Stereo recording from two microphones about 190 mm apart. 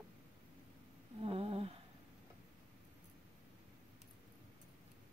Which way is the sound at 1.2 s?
30° right (ahead or behind).